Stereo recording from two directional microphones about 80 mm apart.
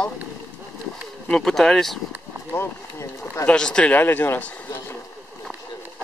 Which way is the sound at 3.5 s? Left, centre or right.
Centre.